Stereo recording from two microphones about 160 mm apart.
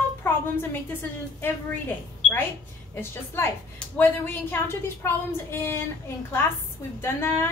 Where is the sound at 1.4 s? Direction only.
15° left (ahead or behind).